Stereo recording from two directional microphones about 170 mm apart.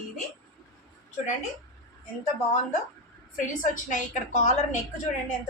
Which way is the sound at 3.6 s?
45° left (ahead or behind).